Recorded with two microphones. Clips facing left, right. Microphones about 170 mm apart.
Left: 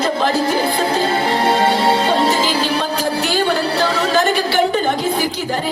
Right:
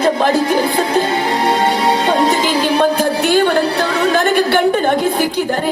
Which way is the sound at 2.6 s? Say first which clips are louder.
Right 5 dB; 55° right (ahead or behind).